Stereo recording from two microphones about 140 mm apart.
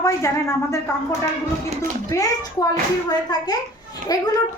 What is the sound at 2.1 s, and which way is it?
A child's voice, 25° left (ahead or behind).